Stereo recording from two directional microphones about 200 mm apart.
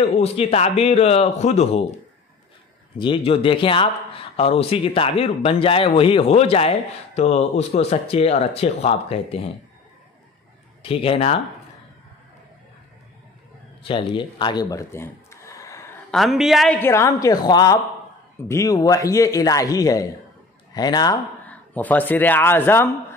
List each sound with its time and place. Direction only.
0.0 s speech: 30° left (ahead or behind)
3.0 s speech: 25° left (ahead or behind)
10.8 s speech: 30° left (ahead or behind)
13.8 s speech: 25° left (ahead or behind)
16.1 s a woman's voice: centre (ahead or behind); by 21.2 s 20° left (ahead or behind)
21.5 s speech: 10° left (ahead or behind)